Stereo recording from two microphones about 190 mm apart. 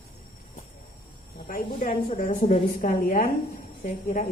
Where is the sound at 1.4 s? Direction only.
45° left (ahead or behind).